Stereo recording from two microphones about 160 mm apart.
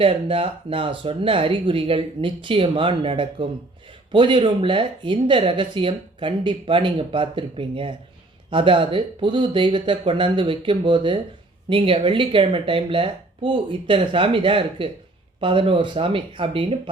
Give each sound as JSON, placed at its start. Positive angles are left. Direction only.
{"t": 0.0, "sound": "speech", "side_deg": -35}